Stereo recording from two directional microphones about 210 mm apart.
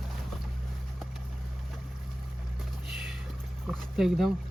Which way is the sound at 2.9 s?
Centre (ahead or behind).